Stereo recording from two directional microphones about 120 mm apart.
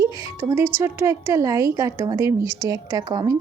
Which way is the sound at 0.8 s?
25° right (ahead or behind).